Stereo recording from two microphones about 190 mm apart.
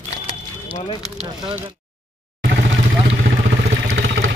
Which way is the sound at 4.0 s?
75° right (ahead or behind).